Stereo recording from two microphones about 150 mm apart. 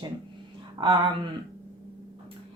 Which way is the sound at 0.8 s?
35° right (ahead or behind).